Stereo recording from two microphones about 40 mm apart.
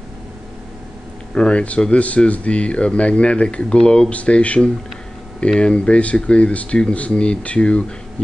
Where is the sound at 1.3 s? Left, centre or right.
Left.